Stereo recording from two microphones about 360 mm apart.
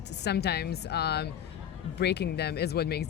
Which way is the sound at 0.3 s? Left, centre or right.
Left.